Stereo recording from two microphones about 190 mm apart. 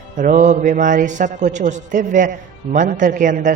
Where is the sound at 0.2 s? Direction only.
40° right (ahead or behind).